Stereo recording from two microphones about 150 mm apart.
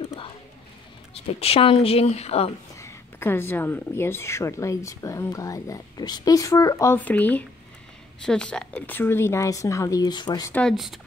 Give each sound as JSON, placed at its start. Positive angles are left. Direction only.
{"t": 0.0, "sound": "a sound", "side_deg": 35}
{"t": 1.4, "sound": "a woman's voice", "side_deg": 40}
{"t": 2.7, "sound": "speech", "side_deg": 20}
{"t": 10.5, "sound": "speech", "side_deg": 5}